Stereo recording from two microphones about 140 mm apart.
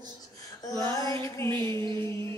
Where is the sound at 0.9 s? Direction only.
25° left (ahead or behind).